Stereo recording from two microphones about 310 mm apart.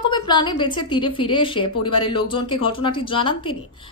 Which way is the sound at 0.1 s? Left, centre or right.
Centre.